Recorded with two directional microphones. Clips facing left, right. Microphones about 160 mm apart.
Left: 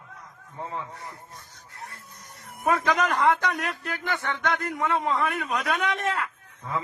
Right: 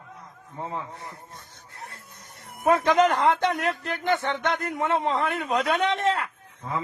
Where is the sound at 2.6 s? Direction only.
30° right (ahead or behind).